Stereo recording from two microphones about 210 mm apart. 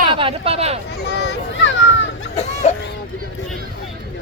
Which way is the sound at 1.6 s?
60° left (ahead or behind).